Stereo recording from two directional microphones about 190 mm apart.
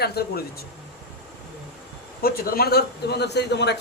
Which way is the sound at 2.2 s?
50° left (ahead or behind).